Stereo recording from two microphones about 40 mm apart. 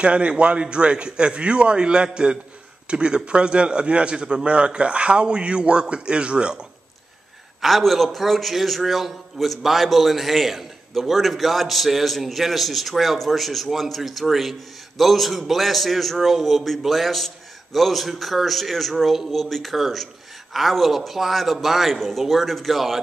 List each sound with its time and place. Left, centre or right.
0.0 s a man's voice: right
7.6 s a man's voice: centre